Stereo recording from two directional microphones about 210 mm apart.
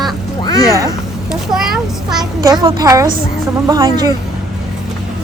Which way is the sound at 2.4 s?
20° right (ahead or behind).